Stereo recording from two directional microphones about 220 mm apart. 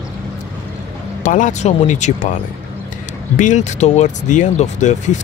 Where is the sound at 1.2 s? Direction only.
35° left (ahead or behind).